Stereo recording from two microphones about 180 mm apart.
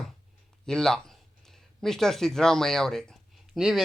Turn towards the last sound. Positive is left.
turn(degrees=0)  # may be behind; listen again after turning